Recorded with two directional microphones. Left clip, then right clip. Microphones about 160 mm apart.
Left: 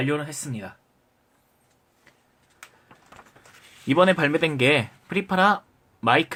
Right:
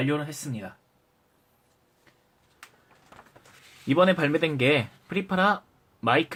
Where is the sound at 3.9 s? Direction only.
20° left (ahead or behind).